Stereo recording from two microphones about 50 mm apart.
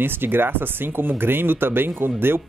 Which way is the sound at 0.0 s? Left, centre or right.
Right.